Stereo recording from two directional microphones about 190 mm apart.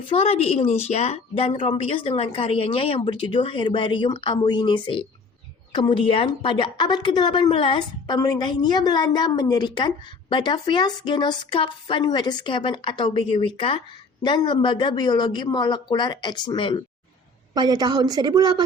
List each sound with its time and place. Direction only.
0.1 s a woman's voice: 30° left (ahead or behind)
17.5 s a woman's voice: 20° right (ahead or behind)